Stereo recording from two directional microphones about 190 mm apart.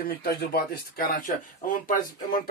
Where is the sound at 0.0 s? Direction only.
50° left (ahead or behind).